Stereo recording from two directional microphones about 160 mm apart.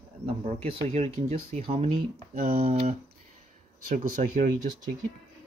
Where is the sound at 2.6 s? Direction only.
40° right (ahead or behind).